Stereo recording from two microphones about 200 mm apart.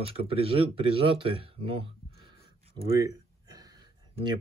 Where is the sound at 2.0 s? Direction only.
55° left (ahead or behind).